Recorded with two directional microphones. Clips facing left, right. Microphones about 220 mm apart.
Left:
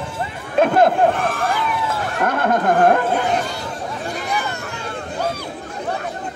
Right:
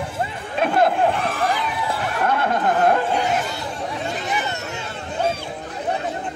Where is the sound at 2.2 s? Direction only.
50° left (ahead or behind).